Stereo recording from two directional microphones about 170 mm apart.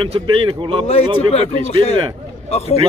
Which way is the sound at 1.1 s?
35° left (ahead or behind).